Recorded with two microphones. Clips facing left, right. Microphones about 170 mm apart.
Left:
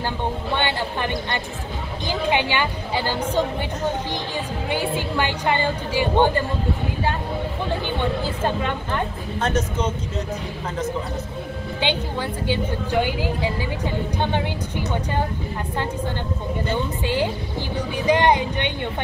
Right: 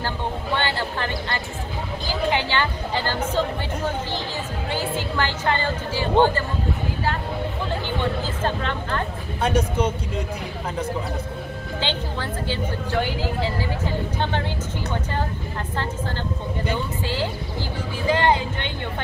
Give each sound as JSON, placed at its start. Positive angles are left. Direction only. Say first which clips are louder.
{"t": 0.6, "sound": "a woman's voice", "louder": "left 2 dB", "side_deg": 15}
{"t": 4.6, "sound": "a woman's voice", "louder": "left 2 dB", "side_deg": 15}
{"t": 8.5, "sound": "a woman's voice", "louder": "left 1 dB", "side_deg": 15}
{"t": 9.4, "sound": "speech", "louder": "right 2 dB", "side_deg": -10}
{"t": 11.8, "sound": "a woman's voice", "louder": "left 4 dB", "side_deg": 15}
{"t": 17.0, "sound": "a woman's voice", "louder": "left 3 dB", "side_deg": 20}